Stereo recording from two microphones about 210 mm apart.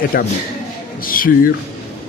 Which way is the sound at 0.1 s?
45° left (ahead or behind).